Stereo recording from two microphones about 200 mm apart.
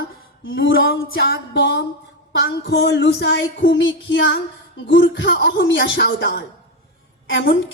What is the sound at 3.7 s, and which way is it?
Music, 65° left (ahead or behind).